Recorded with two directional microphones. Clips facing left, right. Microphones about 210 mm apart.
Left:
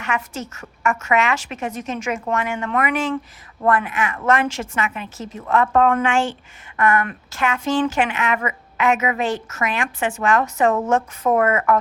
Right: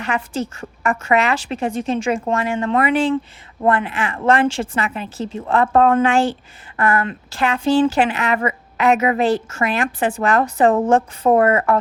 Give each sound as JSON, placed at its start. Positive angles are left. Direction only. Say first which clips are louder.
{"t": 0.0, "sound": "a woman's voice", "louder": "right 4 dB", "side_deg": -35}